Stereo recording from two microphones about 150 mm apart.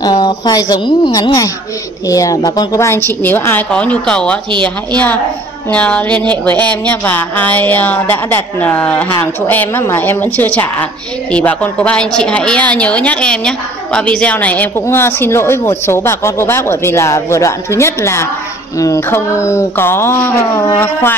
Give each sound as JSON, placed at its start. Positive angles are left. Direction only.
{"t": 0.0, "sound": "a woman's voice", "side_deg": 25}